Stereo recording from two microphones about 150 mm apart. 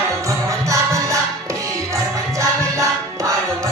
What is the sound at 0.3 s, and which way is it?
Music, 20° right (ahead or behind).